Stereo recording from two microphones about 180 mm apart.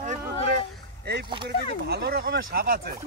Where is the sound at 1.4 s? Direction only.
65° right (ahead or behind).